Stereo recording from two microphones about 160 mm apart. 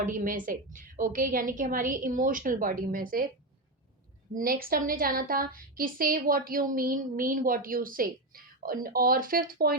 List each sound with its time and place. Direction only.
0.0 s a woman's voice: 55° right (ahead or behind)
4.4 s a woman's voice: 65° right (ahead or behind)